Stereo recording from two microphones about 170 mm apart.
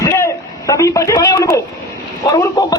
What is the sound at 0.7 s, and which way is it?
A man's voice, 20° left (ahead or behind).